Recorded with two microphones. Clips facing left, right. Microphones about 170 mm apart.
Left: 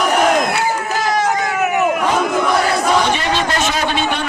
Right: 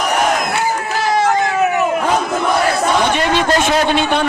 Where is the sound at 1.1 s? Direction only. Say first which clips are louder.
Right 5 dB; 30° right (ahead or behind).